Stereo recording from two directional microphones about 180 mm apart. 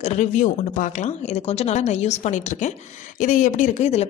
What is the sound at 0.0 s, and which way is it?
A woman's voice, 40° left (ahead or behind).